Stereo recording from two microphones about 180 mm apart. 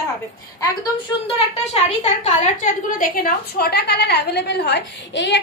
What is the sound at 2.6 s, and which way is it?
A woman's voice, 50° left (ahead or behind).